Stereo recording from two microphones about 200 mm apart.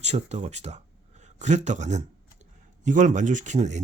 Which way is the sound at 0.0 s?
35° right (ahead or behind).